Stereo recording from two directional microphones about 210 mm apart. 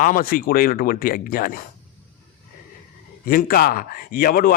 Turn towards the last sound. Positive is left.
turn(degrees=45)  # may be behind; listen again after turning